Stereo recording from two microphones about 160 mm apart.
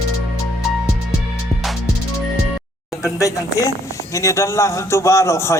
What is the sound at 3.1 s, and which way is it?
A man's voice, 20° left (ahead or behind).